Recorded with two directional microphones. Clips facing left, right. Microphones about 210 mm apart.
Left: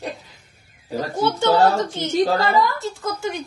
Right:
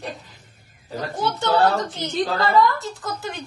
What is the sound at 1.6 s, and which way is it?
Speech, 45° left (ahead or behind).